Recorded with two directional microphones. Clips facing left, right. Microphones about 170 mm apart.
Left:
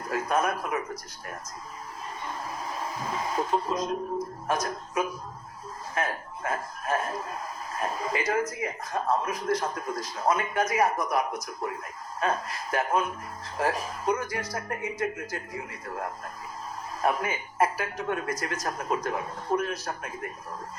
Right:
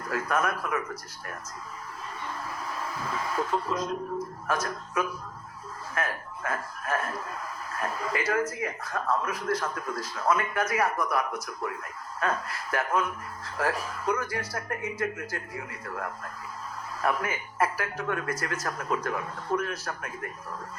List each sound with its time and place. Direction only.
0.0 s a man's voice: 20° left (ahead or behind)
2.4 s speech: 20° left (ahead or behind)